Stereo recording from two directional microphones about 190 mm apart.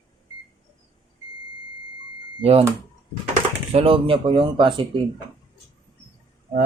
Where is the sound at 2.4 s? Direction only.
30° right (ahead or behind).